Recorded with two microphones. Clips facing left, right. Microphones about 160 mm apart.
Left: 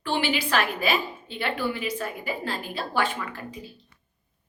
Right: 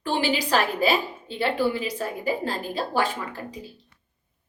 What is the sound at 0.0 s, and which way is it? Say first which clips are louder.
A woman's voice: right 2 dB; 40° right (ahead or behind).